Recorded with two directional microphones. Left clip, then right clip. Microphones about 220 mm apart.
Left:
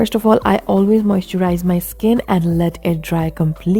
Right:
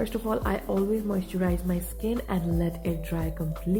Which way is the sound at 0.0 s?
50° left (ahead or behind).